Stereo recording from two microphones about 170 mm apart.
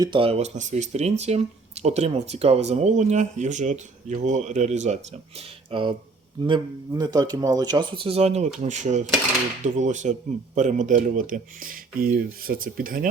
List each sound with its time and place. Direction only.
0.0 s speech: 30° right (ahead or behind)
5.7 s a man's voice: 30° right (ahead or behind); by 13.1 s 55° right (ahead or behind)